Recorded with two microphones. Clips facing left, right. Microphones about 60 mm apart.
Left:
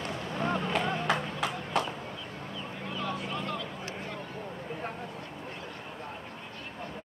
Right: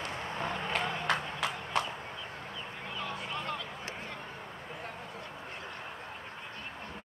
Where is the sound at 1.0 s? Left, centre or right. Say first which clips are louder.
Left 2 dB; centre.